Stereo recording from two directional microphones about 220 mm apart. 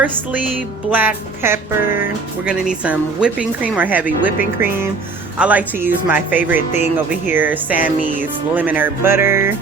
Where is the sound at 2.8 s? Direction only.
5° right (ahead or behind).